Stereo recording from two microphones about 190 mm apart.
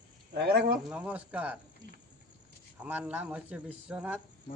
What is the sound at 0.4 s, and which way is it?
Speech, 55° right (ahead or behind).